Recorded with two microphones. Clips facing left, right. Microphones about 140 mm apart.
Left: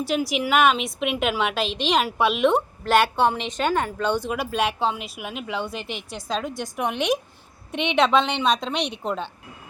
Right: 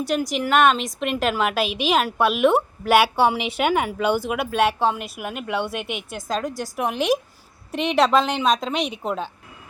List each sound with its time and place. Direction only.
0.0 s a woman's voice: centre (ahead or behind)
5.9 s a woman's voice: 55° right (ahead or behind)
6.2 s a woman's voice: centre (ahead or behind)